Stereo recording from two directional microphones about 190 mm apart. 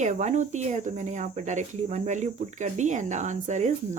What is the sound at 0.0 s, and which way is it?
Speech, 40° right (ahead or behind).